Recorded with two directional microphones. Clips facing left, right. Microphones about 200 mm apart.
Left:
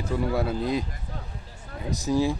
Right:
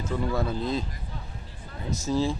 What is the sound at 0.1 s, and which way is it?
Speech, 10° left (ahead or behind).